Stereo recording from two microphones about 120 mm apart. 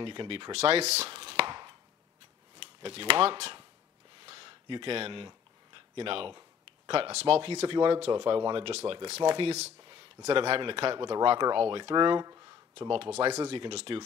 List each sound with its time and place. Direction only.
0.0 s speech: 45° right (ahead or behind)
0.5 s chopping: 60° right (ahead or behind); by 1.8 s 40° right (ahead or behind)
2.8 s speech: 50° right (ahead or behind)
4.3 s speech: 45° right (ahead or behind)
9.2 s speech: 45° right (ahead or behind)
10.5 s speech: 50° right (ahead or behind)
12.7 s speech: 50° right (ahead or behind)